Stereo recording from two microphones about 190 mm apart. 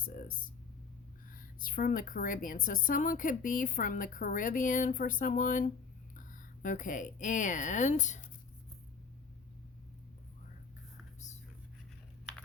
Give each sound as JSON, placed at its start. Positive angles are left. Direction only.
{"t": 0.0, "sound": "a woman's voice", "side_deg": 45}